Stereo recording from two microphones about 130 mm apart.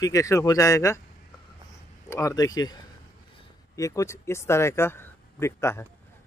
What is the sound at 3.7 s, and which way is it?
Speech, 25° left (ahead or behind).